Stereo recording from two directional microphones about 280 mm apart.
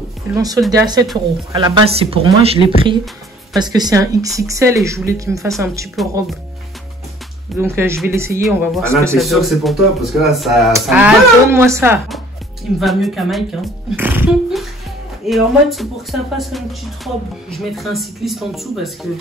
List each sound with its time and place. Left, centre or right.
0.3 s speech: centre
6.0 s speech: centre
7.5 s speech: centre